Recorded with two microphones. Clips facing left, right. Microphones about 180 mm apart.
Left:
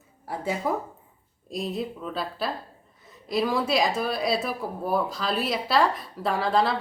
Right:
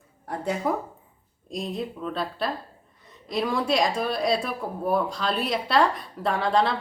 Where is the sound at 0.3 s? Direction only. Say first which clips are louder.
Right 1 dB; centre (ahead or behind).